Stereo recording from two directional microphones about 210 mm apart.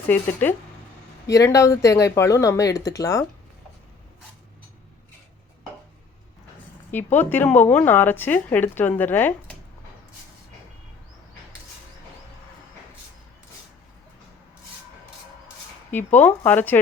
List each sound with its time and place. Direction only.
0.1 s speech: 10° left (ahead or behind)
6.9 s speech: 10° left (ahead or behind)
16.1 s speech: 10° left (ahead or behind)